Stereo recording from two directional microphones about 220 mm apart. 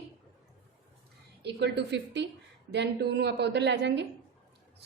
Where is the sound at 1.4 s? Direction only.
50° right (ahead or behind).